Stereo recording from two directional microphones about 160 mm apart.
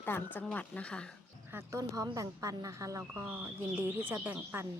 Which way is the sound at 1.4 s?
15° right (ahead or behind).